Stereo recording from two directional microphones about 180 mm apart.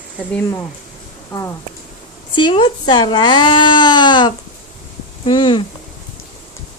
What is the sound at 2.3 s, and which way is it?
Speech, 25° left (ahead or behind).